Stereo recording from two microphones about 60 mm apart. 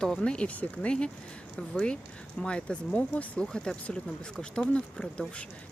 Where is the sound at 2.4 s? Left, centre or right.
Centre.